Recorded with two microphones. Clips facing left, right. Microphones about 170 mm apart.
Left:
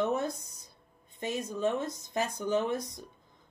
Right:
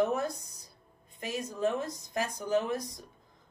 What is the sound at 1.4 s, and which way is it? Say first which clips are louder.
Speech: even; 25° left (ahead or behind).